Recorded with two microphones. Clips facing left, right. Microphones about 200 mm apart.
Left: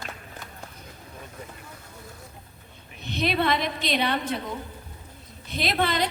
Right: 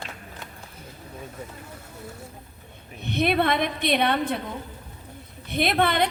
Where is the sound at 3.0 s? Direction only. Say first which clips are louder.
Right 3 dB; 55° right (ahead or behind).